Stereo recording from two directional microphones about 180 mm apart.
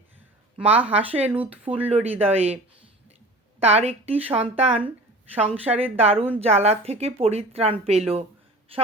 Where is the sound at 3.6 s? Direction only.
35° right (ahead or behind).